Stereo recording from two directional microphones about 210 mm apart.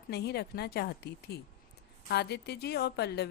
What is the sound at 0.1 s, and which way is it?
A woman's voice, 50° left (ahead or behind).